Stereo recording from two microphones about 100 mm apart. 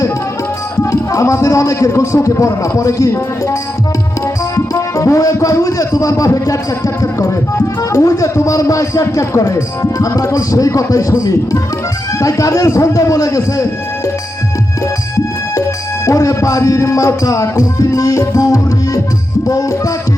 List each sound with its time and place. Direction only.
0.8 s a man's voice: 30° left (ahead or behind)
16.0 s speech: 30° left (ahead or behind)